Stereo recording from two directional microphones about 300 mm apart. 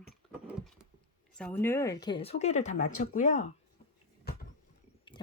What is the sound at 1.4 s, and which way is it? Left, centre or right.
Speech, centre.